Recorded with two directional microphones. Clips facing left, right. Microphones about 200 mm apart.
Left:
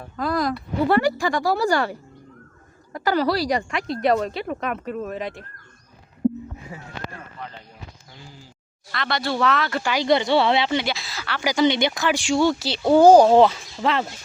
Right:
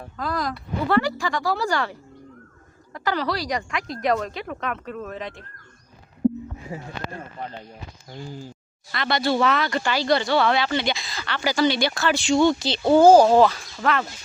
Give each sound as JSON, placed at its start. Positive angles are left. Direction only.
{"t": 0.2, "sound": "speech", "side_deg": 10}
{"t": 3.0, "sound": "speech", "side_deg": 5}
{"t": 3.5, "sound": "speech", "side_deg": 30}
{"t": 4.1, "sound": "speech", "side_deg": 5}
{"t": 8.9, "sound": "speech", "side_deg": 0}
{"t": 9.9, "sound": "speech", "side_deg": 20}
{"t": 10.8, "sound": "speech", "side_deg": 5}